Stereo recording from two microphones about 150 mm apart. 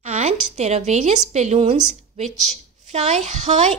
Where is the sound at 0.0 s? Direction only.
50° right (ahead or behind).